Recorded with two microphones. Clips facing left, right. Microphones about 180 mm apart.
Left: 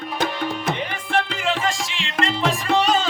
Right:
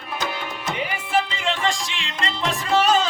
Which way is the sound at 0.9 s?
5° right (ahead or behind).